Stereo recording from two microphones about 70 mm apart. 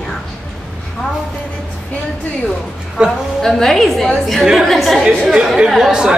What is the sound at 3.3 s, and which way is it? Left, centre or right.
A woman's voice, centre.